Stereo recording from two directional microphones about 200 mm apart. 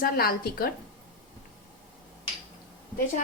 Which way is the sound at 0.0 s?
50° left (ahead or behind).